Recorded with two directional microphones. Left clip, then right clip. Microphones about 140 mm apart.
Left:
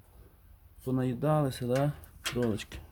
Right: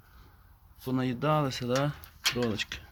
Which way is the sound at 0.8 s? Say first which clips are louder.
Right 1 dB; 15° left (ahead or behind).